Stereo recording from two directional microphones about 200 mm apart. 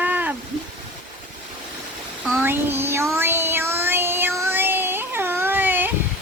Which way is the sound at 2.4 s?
10° right (ahead or behind).